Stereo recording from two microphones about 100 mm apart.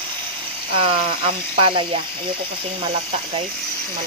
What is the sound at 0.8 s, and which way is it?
Speech, 65° right (ahead or behind).